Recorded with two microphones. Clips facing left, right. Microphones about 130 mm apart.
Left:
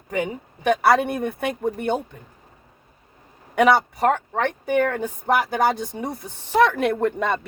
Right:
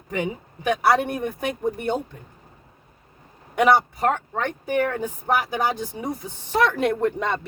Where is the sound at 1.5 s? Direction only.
60° left (ahead or behind).